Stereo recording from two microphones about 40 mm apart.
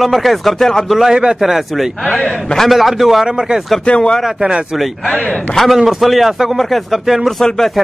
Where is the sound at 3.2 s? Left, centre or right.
Centre.